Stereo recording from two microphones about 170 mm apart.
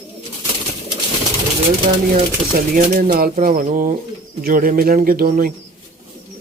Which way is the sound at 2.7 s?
55° right (ahead or behind).